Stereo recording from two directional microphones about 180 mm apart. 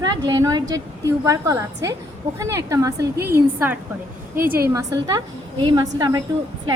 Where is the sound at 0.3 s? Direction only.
20° right (ahead or behind).